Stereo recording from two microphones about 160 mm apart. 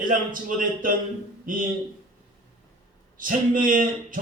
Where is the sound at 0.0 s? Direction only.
55° right (ahead or behind).